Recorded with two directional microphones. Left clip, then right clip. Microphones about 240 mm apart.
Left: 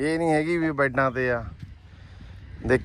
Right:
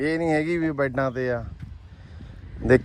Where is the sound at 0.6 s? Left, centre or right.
Centre.